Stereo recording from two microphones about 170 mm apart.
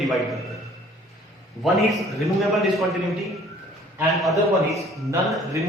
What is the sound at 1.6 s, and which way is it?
A man's voice, centre (ahead or behind).